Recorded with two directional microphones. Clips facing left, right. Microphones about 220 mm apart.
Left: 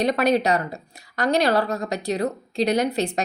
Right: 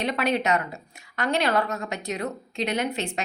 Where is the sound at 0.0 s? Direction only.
40° left (ahead or behind).